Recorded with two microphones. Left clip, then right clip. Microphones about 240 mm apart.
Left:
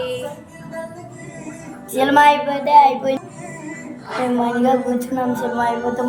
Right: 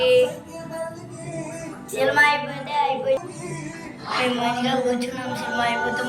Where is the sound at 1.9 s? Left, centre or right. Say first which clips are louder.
Left 5 dB; left.